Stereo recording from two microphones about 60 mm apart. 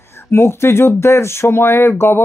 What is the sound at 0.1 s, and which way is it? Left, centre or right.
Speech, left.